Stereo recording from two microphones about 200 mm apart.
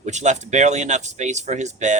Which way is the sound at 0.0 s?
35° right (ahead or behind).